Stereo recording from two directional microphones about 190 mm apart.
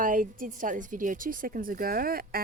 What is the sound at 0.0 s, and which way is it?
Speech, 45° right (ahead or behind).